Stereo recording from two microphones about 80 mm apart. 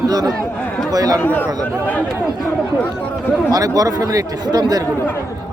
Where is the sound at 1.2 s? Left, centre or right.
Left.